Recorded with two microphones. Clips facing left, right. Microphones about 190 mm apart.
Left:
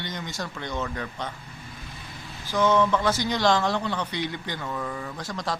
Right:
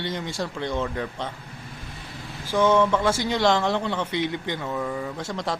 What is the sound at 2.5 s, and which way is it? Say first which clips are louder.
A man's voice: right 2 dB; 30° right (ahead or behind).